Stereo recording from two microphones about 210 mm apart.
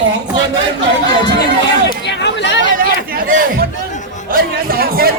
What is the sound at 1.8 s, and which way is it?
Chatter, 55° left (ahead or behind).